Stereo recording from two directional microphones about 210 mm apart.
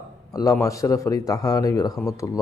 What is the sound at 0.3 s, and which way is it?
A man's voice, 15° left (ahead or behind).